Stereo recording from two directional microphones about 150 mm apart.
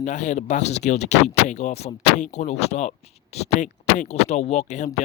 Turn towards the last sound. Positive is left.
turn(degrees=50)  # may be behind; listen again after turning